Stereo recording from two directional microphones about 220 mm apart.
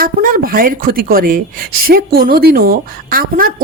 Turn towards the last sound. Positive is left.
turn(degrees=-40)  # may be behind; listen again after turning